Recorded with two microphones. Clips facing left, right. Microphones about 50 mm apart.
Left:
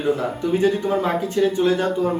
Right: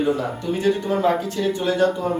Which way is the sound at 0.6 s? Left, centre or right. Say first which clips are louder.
Right 2 dB; centre.